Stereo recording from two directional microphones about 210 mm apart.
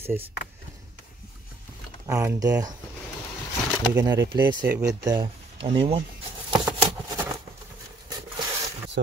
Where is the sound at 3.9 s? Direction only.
15° right (ahead or behind).